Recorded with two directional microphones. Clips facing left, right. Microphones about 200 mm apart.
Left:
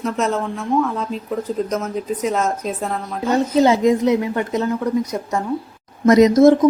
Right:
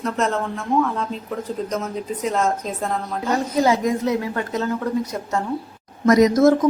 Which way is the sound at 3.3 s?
25° left (ahead or behind).